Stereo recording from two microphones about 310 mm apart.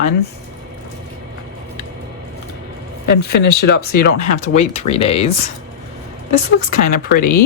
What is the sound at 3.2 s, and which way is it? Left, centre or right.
Speech, left.